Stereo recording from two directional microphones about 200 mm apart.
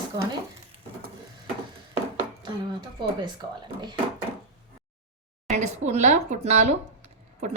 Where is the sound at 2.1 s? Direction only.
25° right (ahead or behind).